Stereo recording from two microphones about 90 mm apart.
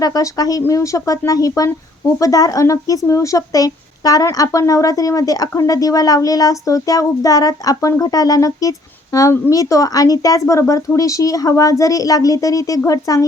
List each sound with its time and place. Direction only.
0.0 s speech: 40° left (ahead or behind)